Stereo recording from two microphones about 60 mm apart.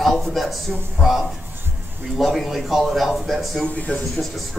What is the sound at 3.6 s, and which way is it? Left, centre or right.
Speech, left.